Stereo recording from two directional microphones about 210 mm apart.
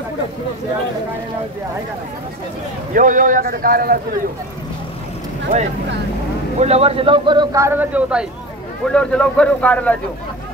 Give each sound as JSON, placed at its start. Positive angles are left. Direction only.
{"t": 2.9, "sound": "a man's voice", "side_deg": -40}
{"t": 6.6, "sound": "speech", "side_deg": -30}
{"t": 8.9, "sound": "speech", "side_deg": 5}